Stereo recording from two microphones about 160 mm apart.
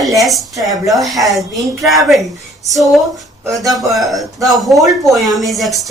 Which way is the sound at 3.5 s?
Centre (ahead or behind).